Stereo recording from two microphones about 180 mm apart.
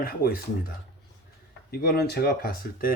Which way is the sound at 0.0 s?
55° left (ahead or behind).